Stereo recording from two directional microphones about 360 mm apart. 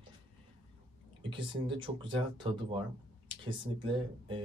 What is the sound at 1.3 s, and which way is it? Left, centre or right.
Speech, centre.